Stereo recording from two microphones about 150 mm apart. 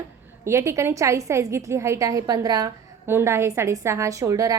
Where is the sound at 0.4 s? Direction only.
20° right (ahead or behind).